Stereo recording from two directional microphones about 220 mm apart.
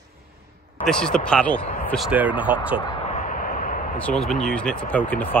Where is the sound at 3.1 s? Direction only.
35° left (ahead or behind).